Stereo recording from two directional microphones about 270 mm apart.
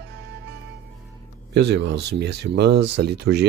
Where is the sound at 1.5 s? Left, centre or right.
Right.